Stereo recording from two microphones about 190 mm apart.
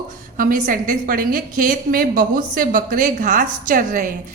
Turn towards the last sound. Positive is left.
turn(degrees=-45)  # may be behind; listen again after turning